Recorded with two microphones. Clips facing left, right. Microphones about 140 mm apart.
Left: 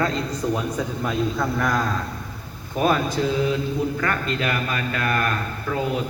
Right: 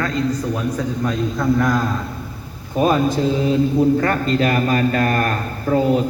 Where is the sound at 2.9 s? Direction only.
30° right (ahead or behind).